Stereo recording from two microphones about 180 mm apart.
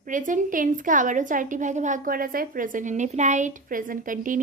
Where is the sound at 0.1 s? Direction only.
45° right (ahead or behind).